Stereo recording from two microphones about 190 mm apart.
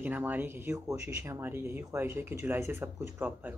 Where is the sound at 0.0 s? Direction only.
10° right (ahead or behind).